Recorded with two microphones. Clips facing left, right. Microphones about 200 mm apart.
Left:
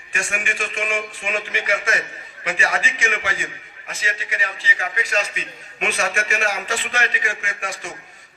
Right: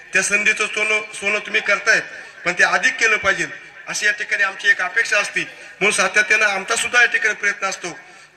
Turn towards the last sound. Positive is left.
turn(degrees=-80)